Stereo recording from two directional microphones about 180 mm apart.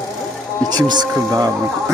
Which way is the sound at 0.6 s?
25° right (ahead or behind).